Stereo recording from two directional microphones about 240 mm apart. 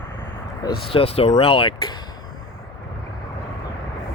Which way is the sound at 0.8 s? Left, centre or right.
Left.